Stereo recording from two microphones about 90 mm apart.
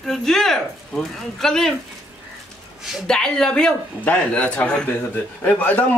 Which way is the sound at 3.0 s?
5° left (ahead or behind).